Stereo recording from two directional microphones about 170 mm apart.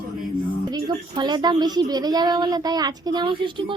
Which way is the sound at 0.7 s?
25° right (ahead or behind).